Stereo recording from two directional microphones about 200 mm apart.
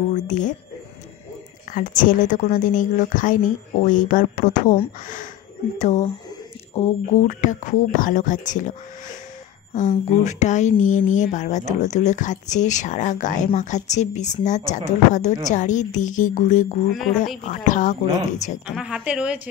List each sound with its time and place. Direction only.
0.1 s speech: 40° left (ahead or behind)
1.7 s speech: 40° left (ahead or behind)
9.8 s speech: 35° left (ahead or behind)
16.9 s a woman's voice: centre (ahead or behind)
17.4 s speech: 40° left (ahead or behind)
18.7 s a woman's voice: 5° right (ahead or behind)